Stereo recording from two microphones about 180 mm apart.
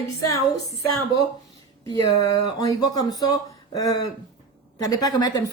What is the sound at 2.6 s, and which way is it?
A woman's voice, 20° left (ahead or behind).